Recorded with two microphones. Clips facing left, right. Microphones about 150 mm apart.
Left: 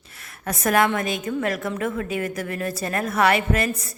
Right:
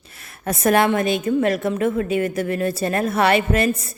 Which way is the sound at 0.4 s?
25° right (ahead or behind).